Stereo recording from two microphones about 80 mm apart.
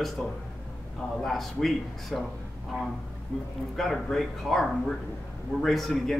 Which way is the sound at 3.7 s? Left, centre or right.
Centre.